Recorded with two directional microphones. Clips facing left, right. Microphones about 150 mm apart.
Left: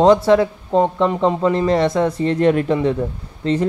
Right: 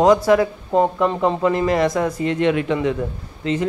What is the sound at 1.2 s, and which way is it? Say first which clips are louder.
A man's voice: left 2 dB; 25° left (ahead or behind).